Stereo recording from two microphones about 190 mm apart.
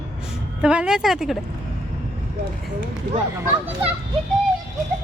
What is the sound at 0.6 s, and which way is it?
Speech, 5° right (ahead or behind).